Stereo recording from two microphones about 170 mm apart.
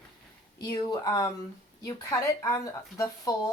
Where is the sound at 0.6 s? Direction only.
25° left (ahead or behind).